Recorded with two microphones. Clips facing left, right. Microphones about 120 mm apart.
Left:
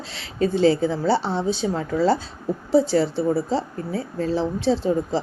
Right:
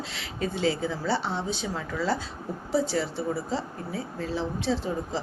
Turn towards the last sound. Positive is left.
turn(degrees=30)  # may be behind; listen again after turning